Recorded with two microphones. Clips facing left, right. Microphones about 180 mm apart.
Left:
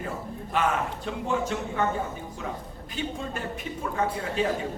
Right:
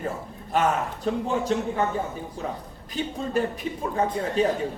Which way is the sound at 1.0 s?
35° right (ahead or behind).